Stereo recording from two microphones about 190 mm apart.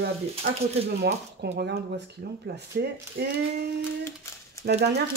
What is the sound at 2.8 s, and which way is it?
Speech, 60° right (ahead or behind).